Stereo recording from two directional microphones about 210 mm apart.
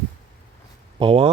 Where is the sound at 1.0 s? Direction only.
25° right (ahead or behind).